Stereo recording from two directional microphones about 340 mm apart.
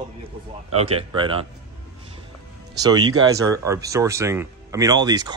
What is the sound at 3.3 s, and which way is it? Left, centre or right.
Speech, centre.